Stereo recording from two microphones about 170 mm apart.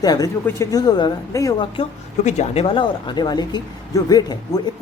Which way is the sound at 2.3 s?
40° left (ahead or behind).